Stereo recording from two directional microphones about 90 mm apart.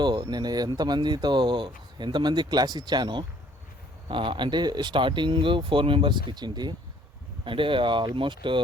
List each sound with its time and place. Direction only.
0.0 s speech: 55° right (ahead or behind)
4.1 s speech: 65° right (ahead or behind)
7.4 s speech: 70° right (ahead or behind)